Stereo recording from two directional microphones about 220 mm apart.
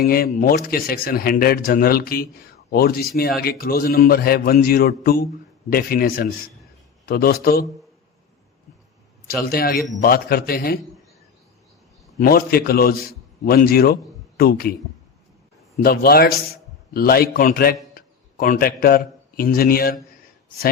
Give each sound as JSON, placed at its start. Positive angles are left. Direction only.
{"t": 0.0, "sound": "a man's voice", "side_deg": 45}
{"t": 9.2, "sound": "a man's voice", "side_deg": 45}
{"t": 12.2, "sound": "a man's voice", "side_deg": 40}
{"t": 15.8, "sound": "a man's voice", "side_deg": 45}